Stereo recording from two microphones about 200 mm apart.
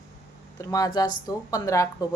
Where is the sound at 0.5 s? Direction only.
15° left (ahead or behind).